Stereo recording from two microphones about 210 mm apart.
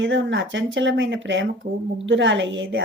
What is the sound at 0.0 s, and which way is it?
Speech, 60° right (ahead or behind).